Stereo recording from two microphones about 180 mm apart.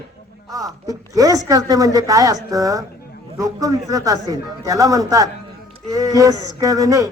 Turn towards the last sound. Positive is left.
turn(degrees=-20)  # may be behind; listen again after turning